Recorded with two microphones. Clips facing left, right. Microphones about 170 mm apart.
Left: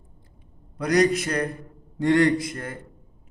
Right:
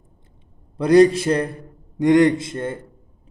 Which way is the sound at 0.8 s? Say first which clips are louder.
Right 7 dB; 30° right (ahead or behind).